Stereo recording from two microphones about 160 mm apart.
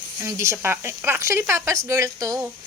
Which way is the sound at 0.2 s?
15° right (ahead or behind).